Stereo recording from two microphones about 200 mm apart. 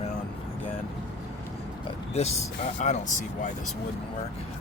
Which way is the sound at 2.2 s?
35° left (ahead or behind).